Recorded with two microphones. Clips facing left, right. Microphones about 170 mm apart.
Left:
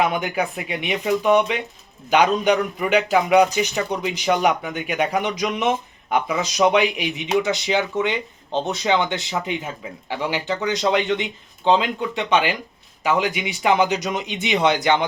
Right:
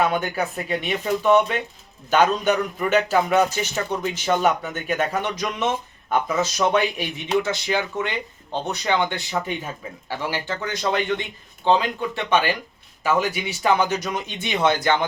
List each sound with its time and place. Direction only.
0.0 s a man's voice: 15° left (ahead or behind)